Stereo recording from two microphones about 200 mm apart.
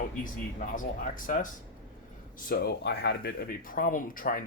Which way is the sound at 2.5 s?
50° left (ahead or behind).